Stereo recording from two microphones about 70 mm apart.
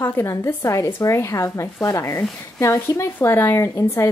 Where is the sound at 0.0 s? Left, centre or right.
Left.